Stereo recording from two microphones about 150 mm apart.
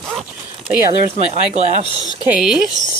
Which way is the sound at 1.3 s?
45° right (ahead or behind).